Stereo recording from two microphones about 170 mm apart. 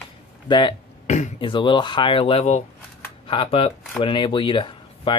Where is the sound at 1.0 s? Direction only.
45° left (ahead or behind).